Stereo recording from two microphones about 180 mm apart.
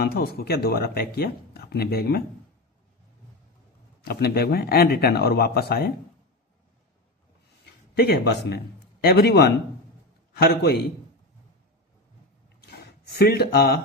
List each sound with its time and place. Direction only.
0.0 s speech: 60° left (ahead or behind)
4.0 s speech: 60° left (ahead or behind)
7.6 s speech: 65° left (ahead or behind)
12.6 s gasp: 65° left (ahead or behind)